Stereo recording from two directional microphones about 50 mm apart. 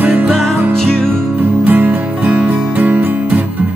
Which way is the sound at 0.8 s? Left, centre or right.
Centre.